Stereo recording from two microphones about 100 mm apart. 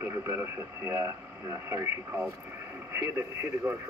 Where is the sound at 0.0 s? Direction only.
25° right (ahead or behind).